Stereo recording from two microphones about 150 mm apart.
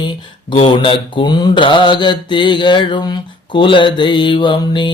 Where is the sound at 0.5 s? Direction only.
35° left (ahead or behind).